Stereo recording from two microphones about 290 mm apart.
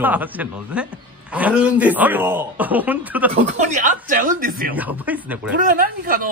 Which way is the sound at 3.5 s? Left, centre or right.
Right.